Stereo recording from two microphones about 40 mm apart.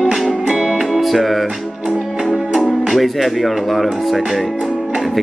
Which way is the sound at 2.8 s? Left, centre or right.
Centre.